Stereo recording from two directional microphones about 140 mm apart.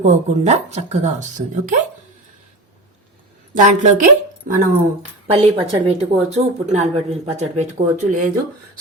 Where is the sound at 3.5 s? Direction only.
60° right (ahead or behind).